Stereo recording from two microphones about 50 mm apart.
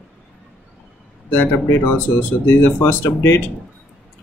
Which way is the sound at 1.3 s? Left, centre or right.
Left.